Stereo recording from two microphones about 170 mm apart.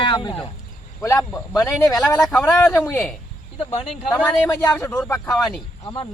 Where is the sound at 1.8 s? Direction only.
Centre (ahead or behind).